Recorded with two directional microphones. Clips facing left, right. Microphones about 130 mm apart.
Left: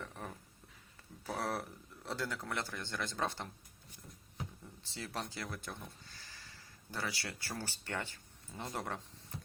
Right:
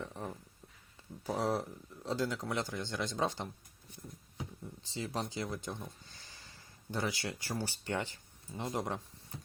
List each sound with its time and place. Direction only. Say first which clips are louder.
0.0 s a sound: right 4 dB; 15° right (ahead or behind)
1.3 s speech: right 5 dB; 15° right (ahead or behind)
4.8 s speech: right 4 dB; 15° right (ahead or behind)